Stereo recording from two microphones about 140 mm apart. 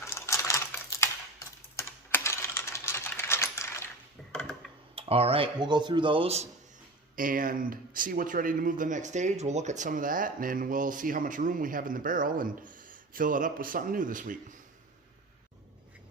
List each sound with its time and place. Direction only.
0.0 s typing: 20° left (ahead or behind)
4.2 s a sound: 5° left (ahead or behind)
4.9 s speech: 45° right (ahead or behind)
7.2 s speech: 75° right (ahead or behind)